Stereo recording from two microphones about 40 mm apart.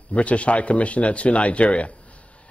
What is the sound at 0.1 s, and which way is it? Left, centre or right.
Speech, left.